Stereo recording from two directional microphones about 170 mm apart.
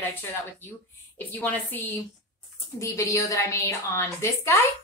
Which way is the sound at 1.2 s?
10° left (ahead or behind).